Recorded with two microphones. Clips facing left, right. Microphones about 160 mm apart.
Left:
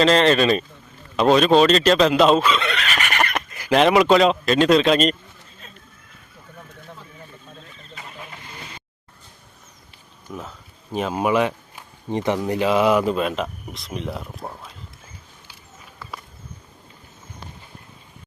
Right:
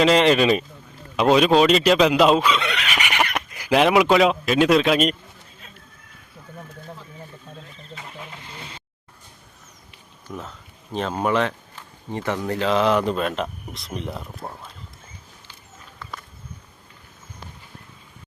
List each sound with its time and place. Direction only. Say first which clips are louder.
0.0 s speech: even; 10° right (ahead or behind)
8.3 s vehicle: even; 25° right (ahead or behind)
10.3 s speech: even; centre (ahead or behind)